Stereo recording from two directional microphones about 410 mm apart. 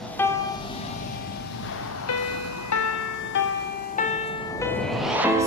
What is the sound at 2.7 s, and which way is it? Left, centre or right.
Music, left.